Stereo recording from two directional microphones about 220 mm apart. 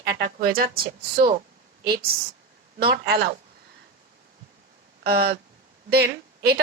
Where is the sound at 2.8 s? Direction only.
45° right (ahead or behind).